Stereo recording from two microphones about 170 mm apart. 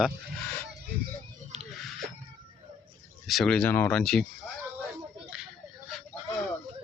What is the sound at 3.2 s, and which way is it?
Speech, centre (ahead or behind).